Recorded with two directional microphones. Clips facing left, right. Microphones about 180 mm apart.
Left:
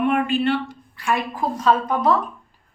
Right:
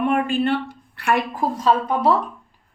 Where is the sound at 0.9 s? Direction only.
60° right (ahead or behind).